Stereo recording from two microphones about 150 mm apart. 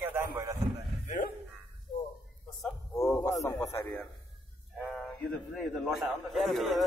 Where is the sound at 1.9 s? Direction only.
50° left (ahead or behind).